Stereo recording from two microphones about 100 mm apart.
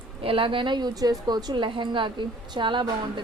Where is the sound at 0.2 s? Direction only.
65° right (ahead or behind).